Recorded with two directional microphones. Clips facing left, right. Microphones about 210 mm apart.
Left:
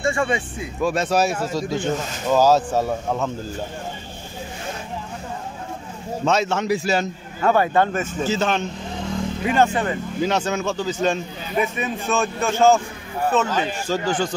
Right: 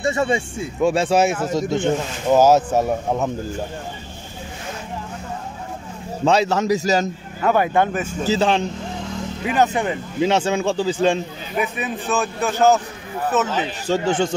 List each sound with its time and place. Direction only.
0.0 s speech: 20° right (ahead or behind)
6.2 s a man's voice: 30° right (ahead or behind)
7.4 s speech: 15° right (ahead or behind)
7.9 s a man's voice: centre (ahead or behind)
8.3 s a man's voice: 30° right (ahead or behind)
9.4 s a man's voice: 5° right (ahead or behind)
10.2 s a man's voice: 30° right (ahead or behind)
11.6 s a man's voice: centre (ahead or behind)
13.8 s speech: 25° right (ahead or behind)